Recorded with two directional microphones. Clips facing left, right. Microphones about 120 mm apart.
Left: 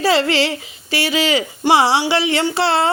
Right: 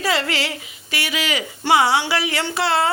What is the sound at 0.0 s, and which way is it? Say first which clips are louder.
Speech: left 6 dB; 30° left (ahead or behind).